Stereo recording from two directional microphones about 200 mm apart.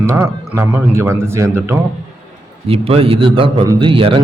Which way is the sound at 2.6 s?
30° right (ahead or behind).